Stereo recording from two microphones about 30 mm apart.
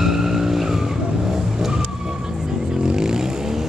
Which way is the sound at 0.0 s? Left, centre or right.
Centre.